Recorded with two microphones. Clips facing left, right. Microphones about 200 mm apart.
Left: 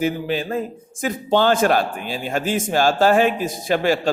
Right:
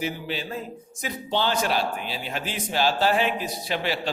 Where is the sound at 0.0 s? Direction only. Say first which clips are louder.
Left 8 dB; 50° left (ahead or behind).